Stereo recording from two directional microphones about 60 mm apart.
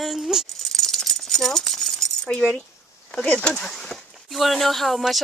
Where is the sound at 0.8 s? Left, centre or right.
Centre.